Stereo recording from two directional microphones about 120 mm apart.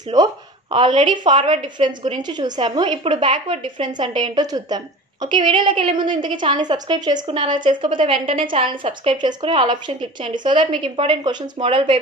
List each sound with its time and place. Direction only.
0.7 s a woman's voice: 45° right (ahead or behind)